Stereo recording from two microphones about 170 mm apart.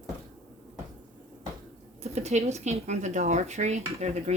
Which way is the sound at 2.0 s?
40° right (ahead or behind).